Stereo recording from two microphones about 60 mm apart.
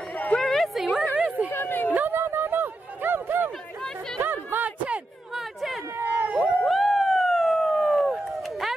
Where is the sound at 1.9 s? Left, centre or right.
Right.